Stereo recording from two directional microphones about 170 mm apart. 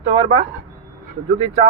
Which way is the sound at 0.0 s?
35° right (ahead or behind).